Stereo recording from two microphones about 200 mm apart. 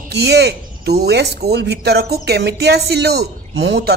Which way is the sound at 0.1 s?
55° right (ahead or behind).